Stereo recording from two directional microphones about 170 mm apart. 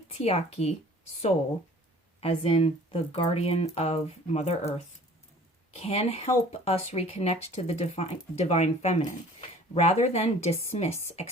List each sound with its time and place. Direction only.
0.1 s speech: 35° left (ahead or behind)
2.2 s speech: 35° left (ahead or behind)
5.7 s speech: 40° left (ahead or behind)